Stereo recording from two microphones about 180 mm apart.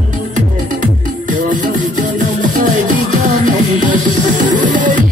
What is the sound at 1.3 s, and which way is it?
Music, 45° right (ahead or behind).